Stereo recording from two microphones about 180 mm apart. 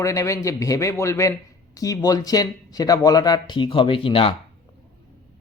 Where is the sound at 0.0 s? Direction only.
15° left (ahead or behind).